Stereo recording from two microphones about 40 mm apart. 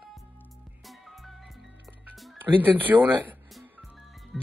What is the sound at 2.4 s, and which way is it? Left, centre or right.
Speech, right.